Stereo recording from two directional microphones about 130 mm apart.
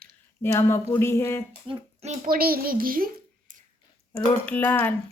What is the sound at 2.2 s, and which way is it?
A child's voice, 90° right.